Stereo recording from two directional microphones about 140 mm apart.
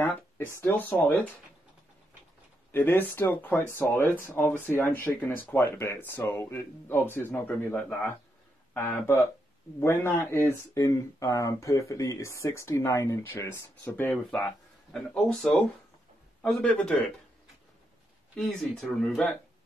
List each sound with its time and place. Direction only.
0.0 s speech: 20° left (ahead or behind)
2.7 s speech: 15° left (ahead or behind)
14.9 s speech: 5° left (ahead or behind)
18.8 s speech: centre (ahead or behind)